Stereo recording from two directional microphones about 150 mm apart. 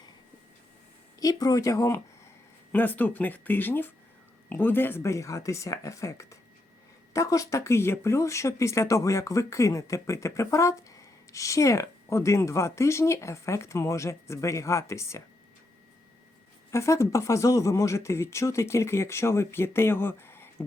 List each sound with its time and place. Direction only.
1.2 s speech: 25° left (ahead or behind)
16.7 s speech: 20° left (ahead or behind)